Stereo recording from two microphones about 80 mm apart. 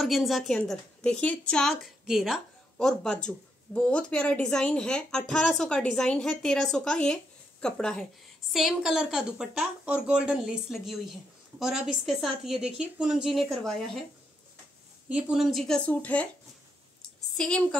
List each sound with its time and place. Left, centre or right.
0.0 s a woman's voice: centre
1.1 s a woman's voice: centre
2.8 s speech: centre
8.5 s a woman's voice: centre
15.0 s speech: centre
15.3 s a woman's voice: centre
15.8 s speech: centre
17.4 s speech: centre